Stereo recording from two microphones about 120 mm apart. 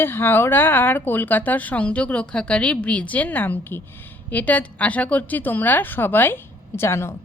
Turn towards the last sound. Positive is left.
turn(degrees=20)  # may be behind; listen again after turning